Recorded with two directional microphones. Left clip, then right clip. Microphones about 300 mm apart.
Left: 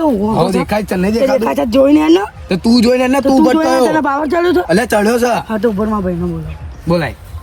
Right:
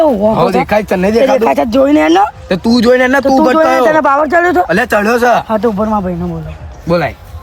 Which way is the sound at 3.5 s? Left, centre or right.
Centre.